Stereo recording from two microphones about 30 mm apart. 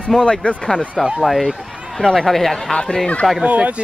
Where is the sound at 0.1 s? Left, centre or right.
Centre.